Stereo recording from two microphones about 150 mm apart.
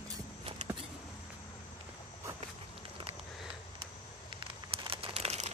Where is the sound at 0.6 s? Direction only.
50° right (ahead or behind).